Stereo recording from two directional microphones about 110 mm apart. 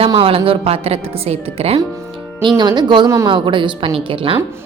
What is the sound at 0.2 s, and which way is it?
A woman's voice, 60° right (ahead or behind).